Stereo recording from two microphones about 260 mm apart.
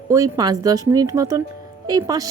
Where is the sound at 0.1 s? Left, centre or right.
Centre.